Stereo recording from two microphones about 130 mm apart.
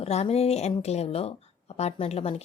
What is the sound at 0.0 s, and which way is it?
A woman's voice, 55° left (ahead or behind).